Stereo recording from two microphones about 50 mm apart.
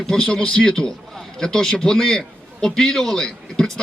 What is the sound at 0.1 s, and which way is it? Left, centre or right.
A man's voice, centre.